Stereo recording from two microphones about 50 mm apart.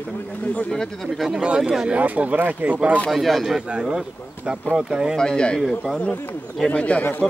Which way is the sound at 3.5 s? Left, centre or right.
Centre.